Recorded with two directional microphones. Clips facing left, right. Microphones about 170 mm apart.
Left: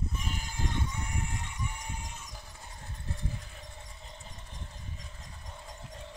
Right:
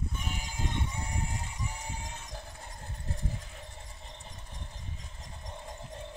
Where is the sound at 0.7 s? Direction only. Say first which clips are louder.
Even; 30° right (ahead or behind).